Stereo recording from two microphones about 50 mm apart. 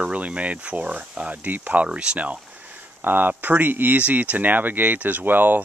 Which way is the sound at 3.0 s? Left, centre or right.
Right.